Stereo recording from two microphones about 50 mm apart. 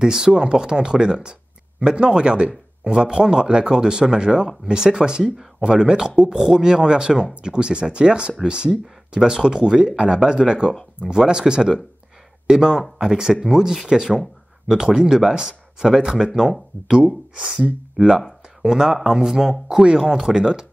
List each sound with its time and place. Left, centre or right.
0.0 s speech: centre
17.4 s speech: right